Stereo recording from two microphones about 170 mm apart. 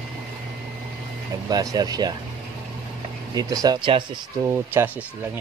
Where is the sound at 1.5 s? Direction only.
20° right (ahead or behind).